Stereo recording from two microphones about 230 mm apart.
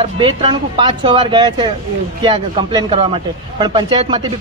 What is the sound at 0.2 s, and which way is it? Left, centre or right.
A man's voice, centre.